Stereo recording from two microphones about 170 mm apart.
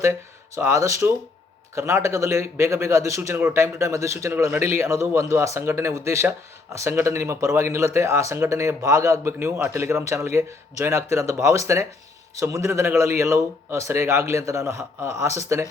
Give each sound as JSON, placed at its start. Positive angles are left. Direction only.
{"t": 0.0, "sound": "a man's voice", "side_deg": -15}